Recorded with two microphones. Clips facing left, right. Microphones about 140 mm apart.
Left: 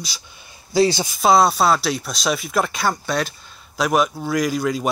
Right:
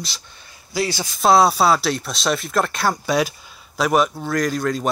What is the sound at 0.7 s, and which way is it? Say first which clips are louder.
Speech: left 6 dB; 25° left (ahead or behind).